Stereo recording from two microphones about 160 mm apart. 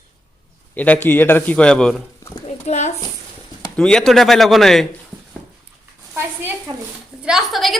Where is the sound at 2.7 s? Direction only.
45° left (ahead or behind).